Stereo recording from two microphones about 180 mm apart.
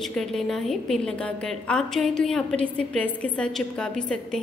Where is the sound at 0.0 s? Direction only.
5° left (ahead or behind).